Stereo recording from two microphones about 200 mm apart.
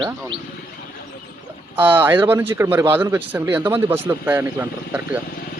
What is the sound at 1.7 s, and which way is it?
A man's voice, 10° right (ahead or behind).